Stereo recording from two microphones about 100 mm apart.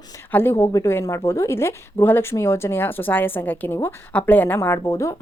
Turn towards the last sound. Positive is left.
turn(degrees=30)  # may be behind; listen again after turning